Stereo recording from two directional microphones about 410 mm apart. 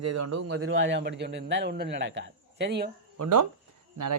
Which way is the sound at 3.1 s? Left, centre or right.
Right.